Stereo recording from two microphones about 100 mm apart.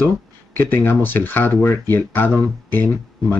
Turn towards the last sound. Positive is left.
turn(degrees=20)  # may be behind; listen again after turning